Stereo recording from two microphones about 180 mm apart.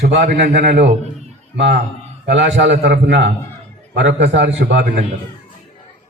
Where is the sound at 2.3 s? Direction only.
70° right (ahead or behind).